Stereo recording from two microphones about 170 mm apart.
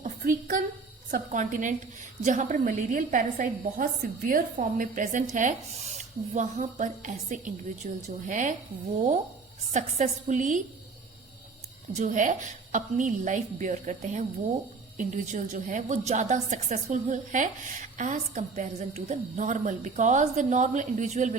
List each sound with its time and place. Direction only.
0.0 s a sound: 50° right (ahead or behind)
1.1 s a woman's voice: 45° right (ahead or behind)
9.7 s a woman's voice: 45° right (ahead or behind)
11.9 s a woman's voice: 45° right (ahead or behind)